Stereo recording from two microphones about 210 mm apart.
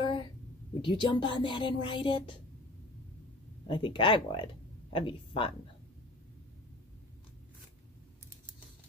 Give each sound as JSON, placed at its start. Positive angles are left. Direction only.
{"t": 0.0, "sound": "a sound", "side_deg": 20}
{"t": 0.8, "sound": "speech", "side_deg": 25}
{"t": 3.6, "sound": "speech", "side_deg": 20}